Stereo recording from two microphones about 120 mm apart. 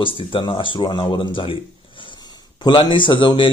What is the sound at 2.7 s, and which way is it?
Speech, 45° left (ahead or behind).